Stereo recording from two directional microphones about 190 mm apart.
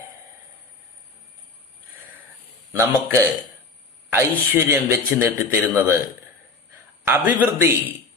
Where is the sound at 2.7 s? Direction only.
15° right (ahead or behind).